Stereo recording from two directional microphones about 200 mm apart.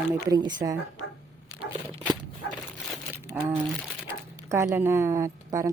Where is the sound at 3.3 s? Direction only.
25° right (ahead or behind).